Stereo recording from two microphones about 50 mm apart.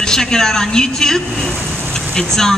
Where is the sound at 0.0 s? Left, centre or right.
Centre.